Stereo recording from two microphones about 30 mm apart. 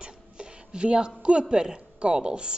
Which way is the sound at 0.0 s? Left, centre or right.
Right.